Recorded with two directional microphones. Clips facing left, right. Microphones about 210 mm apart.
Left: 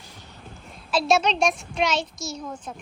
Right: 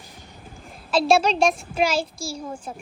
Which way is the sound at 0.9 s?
30° right (ahead or behind).